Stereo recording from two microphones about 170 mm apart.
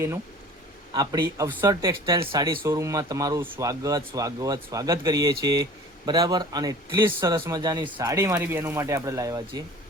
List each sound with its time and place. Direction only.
0.9 s speech: 25° right (ahead or behind)